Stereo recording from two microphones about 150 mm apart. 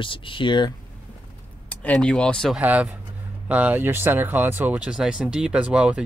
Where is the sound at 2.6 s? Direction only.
10° right (ahead or behind).